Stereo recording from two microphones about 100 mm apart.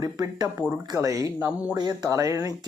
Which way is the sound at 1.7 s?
40° right (ahead or behind).